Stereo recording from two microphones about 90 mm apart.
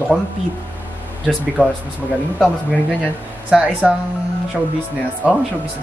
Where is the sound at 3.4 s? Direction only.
15° right (ahead or behind).